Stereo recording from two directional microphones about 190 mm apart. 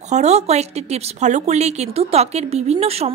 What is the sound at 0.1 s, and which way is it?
A woman's voice, 35° right (ahead or behind).